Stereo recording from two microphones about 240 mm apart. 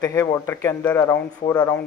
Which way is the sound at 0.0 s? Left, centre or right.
Centre.